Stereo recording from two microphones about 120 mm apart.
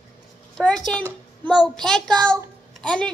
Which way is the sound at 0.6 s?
5° left (ahead or behind).